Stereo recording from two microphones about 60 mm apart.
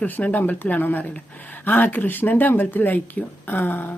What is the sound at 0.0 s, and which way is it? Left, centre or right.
Speech, left.